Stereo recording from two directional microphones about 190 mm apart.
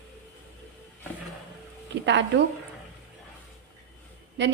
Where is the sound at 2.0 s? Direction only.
70° right (ahead or behind).